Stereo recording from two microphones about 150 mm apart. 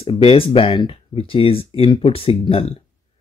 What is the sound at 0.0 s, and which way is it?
Speech, 40° left (ahead or behind).